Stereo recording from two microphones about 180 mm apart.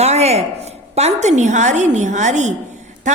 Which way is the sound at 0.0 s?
35° right (ahead or behind).